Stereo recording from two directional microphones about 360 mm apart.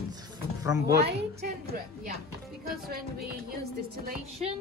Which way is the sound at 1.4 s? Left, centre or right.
Right.